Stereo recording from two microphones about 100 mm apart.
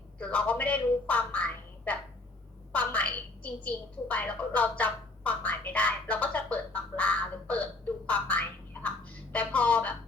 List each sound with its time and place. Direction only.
0.2 s a woman's voice: 15° left (ahead or behind)
4.8 s quack: 15° left (ahead or behind)
9.3 s a woman's voice: 15° left (ahead or behind)